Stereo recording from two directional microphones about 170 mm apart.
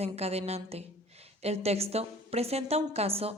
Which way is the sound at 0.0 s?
40° right (ahead or behind).